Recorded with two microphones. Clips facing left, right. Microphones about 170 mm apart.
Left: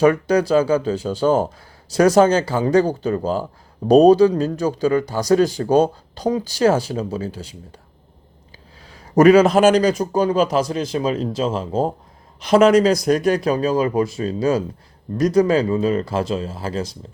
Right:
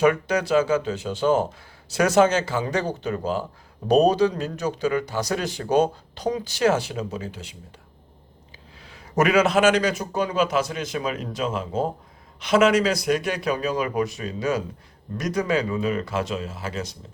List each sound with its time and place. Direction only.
0.0 s speech: 35° left (ahead or behind)
8.8 s speech: 40° left (ahead or behind)